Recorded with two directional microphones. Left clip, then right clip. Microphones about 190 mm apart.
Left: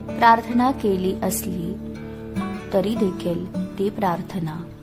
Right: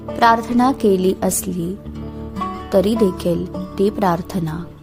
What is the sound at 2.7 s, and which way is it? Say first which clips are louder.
A woman's voice: right 6 dB; 25° right (ahead or behind).